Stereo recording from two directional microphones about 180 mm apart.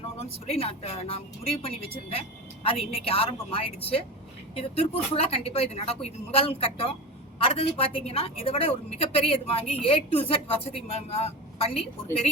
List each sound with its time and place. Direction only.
0.2 s a woman's voice: 35° left (ahead or behind)